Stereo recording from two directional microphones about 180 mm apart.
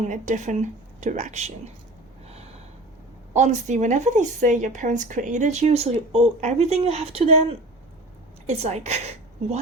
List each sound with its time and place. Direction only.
0.0 s speech: 40° right (ahead or behind)
3.3 s speech: 40° right (ahead or behind)
8.4 s speech: 35° right (ahead or behind)